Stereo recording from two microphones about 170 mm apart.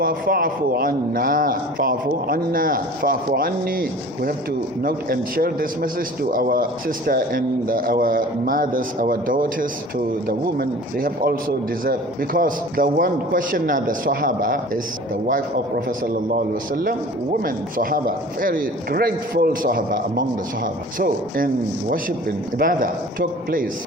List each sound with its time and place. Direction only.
0.0 s a man's voice: 60° right (ahead or behind)
17.4 s a man's voice: 55° right (ahead or behind)